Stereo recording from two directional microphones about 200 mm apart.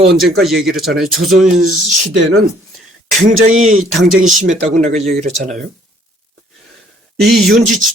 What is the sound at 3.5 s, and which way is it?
Speech, 40° right (ahead or behind).